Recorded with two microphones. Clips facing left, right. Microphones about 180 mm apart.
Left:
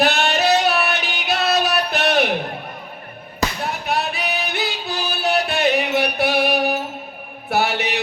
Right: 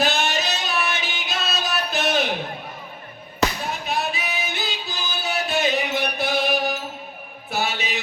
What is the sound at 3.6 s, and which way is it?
Music, 65° left (ahead or behind).